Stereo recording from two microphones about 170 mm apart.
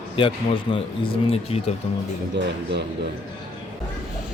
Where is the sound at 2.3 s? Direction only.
90° right.